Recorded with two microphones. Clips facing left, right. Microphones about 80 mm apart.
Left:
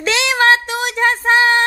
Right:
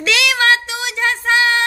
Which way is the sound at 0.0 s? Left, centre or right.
Left.